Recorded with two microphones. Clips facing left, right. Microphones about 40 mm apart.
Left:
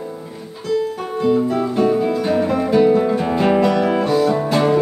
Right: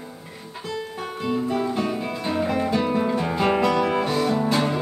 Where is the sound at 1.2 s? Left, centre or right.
Centre.